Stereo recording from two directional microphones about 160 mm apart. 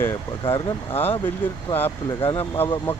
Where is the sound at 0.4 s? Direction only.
35° left (ahead or behind).